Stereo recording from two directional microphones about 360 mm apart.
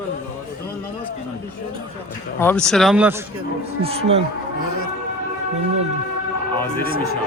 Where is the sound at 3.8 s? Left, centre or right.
Centre.